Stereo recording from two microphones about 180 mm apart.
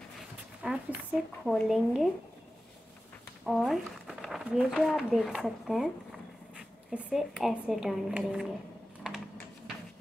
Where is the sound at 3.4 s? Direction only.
Centre (ahead or behind).